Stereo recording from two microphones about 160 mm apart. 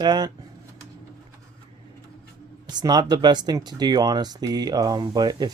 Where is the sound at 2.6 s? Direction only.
25° right (ahead or behind).